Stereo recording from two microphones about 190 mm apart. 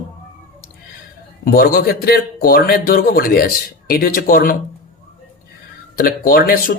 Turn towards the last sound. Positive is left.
turn(degrees=50)  # may be behind; listen again after turning